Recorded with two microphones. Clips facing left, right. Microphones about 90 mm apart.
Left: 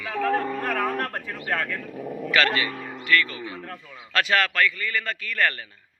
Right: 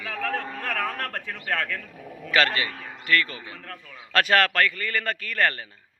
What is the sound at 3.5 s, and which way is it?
Speech, 10° left (ahead or behind).